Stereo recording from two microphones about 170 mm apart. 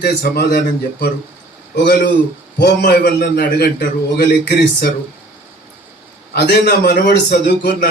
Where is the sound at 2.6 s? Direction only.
70° left (ahead or behind).